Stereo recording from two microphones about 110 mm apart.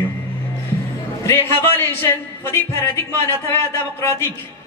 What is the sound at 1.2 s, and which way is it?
A man's voice, 25° left (ahead or behind).